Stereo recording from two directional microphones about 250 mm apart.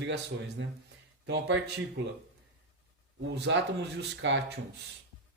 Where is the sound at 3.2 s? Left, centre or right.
Right.